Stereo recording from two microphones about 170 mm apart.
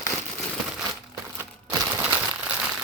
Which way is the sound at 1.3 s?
20° right (ahead or behind).